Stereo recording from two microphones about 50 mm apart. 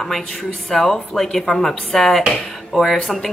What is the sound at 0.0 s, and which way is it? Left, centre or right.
Speech, centre.